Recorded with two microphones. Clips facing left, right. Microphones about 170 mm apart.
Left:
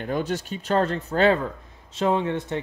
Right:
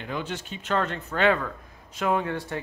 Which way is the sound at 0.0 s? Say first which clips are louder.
Left 6 dB; 40° left (ahead or behind).